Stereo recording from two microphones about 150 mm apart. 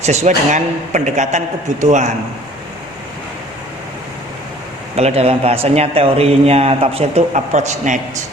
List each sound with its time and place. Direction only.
0.0 s speech: 50° right (ahead or behind)
4.9 s speech: 45° right (ahead or behind)